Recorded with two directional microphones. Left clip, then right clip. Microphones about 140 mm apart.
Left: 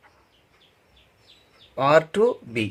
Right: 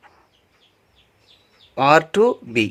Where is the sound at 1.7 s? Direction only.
45° right (ahead or behind).